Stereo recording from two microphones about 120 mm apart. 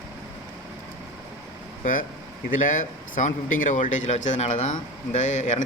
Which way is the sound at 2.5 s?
90° left.